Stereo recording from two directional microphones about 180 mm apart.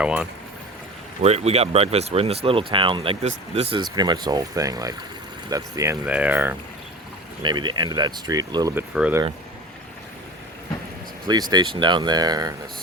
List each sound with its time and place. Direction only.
0.0 s speech: 5° right (ahead or behind)
1.2 s speech: 35° right (ahead or behind); by 6.6 s 10° right (ahead or behind)
7.4 s speech: 25° right (ahead or behind)
9.0 s speech: 10° right (ahead or behind)
11.5 s speech: 25° right (ahead or behind)